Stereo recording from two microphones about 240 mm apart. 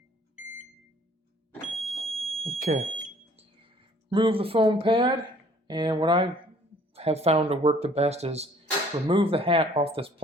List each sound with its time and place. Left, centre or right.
1.8 s fire alarm: centre
2.4 s speech: right
3.3 s a sound: right
5.6 s speech: centre